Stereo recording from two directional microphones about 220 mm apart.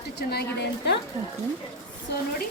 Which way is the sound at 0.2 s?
45° left (ahead or behind).